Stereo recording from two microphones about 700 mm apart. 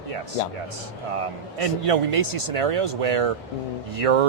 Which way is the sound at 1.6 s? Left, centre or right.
Right.